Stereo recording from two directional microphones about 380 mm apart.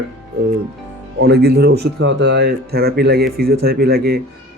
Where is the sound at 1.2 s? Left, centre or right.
Right.